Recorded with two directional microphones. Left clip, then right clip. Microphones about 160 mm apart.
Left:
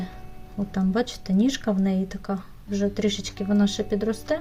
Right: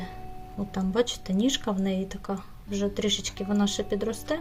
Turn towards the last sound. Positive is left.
turn(degrees=-15)  # may be behind; listen again after turning